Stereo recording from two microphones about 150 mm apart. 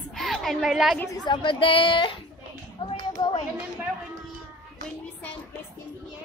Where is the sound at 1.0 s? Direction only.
25° left (ahead or behind).